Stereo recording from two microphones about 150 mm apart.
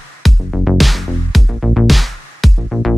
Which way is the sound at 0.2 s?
Centre (ahead or behind).